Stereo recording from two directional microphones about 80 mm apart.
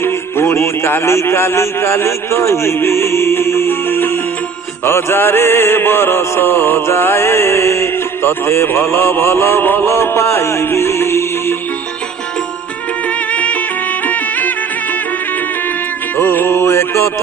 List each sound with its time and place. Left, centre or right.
0.0 s a man's voice: left
4.9 s music: left
13.3 s music: centre
16.1 s music: left